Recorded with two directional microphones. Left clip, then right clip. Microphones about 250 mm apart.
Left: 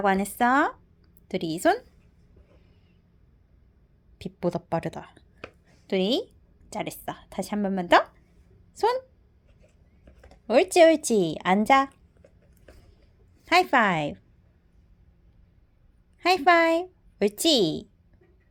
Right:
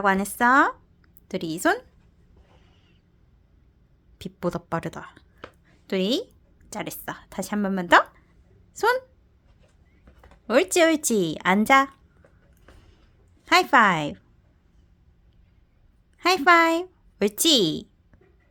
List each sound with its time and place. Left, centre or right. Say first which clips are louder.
0.0 s speech: right 2 dB; centre
4.2 s speech: even; centre
10.4 s speech: left 2 dB; centre
13.4 s a woman's voice: right 3 dB; centre
16.1 s a woman's voice: right 2 dB; centre